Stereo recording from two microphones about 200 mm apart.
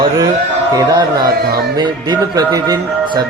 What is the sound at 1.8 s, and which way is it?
Speech, 20° right (ahead or behind).